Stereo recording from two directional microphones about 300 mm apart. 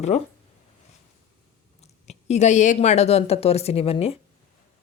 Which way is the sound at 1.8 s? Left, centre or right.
Left.